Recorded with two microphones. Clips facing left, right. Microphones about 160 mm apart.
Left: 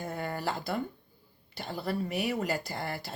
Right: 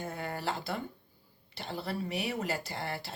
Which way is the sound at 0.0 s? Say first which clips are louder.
Left 2 dB; 40° left (ahead or behind).